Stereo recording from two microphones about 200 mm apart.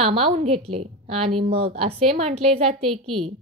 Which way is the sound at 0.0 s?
30° right (ahead or behind).